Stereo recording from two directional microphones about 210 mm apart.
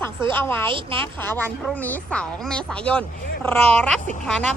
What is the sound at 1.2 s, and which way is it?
A woman's voice, 10° left (ahead or behind).